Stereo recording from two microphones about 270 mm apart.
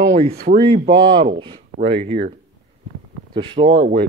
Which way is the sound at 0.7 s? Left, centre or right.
Centre.